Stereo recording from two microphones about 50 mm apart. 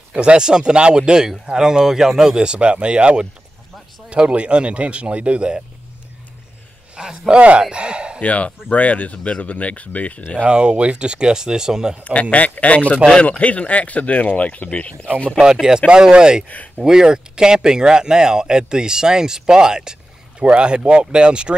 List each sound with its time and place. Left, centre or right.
0.1 s speech: centre
7.0 s speech: centre
7.3 s speech: right
8.2 s speech: left
10.4 s speech: centre
12.0 s speech: left
15.9 s speech: centre